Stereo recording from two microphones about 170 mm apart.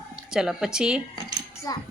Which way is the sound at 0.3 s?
5° right (ahead or behind).